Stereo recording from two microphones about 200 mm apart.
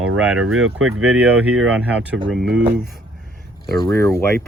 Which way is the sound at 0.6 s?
90° right.